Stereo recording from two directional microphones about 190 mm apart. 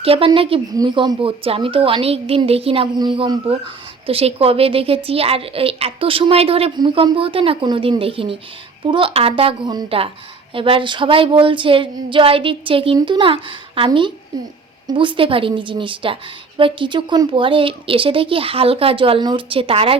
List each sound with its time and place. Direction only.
0.0 s a woman's voice: 30° right (ahead or behind)